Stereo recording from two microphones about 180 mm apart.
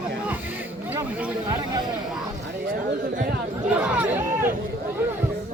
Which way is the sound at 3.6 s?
10° right (ahead or behind).